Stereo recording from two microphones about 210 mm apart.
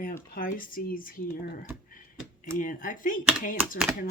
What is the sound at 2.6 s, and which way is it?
Speech, 40° left (ahead or behind).